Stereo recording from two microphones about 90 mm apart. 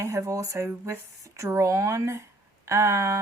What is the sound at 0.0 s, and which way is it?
Speech, 35° right (ahead or behind).